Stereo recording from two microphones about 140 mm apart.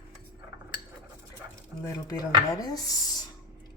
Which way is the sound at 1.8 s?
25° left (ahead or behind).